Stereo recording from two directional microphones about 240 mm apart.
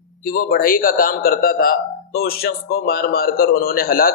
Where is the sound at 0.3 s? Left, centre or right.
Left.